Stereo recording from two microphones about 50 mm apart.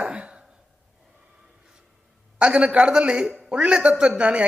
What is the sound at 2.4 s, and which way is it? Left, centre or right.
A man's voice, right.